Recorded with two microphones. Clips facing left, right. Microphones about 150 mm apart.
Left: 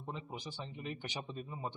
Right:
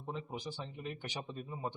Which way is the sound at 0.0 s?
Centre (ahead or behind).